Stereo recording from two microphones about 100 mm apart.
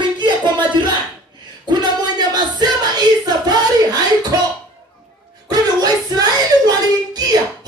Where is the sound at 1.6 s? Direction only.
45° right (ahead or behind).